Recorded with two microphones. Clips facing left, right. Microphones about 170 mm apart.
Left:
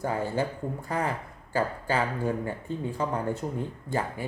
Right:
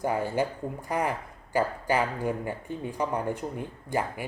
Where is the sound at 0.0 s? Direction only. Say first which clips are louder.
Right 1 dB; 15° right (ahead or behind).